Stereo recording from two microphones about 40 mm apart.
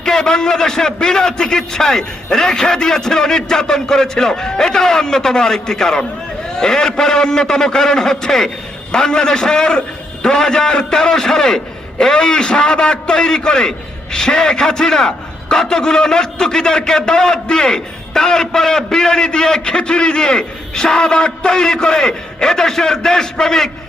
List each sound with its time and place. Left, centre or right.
0.0 s a man's voice: centre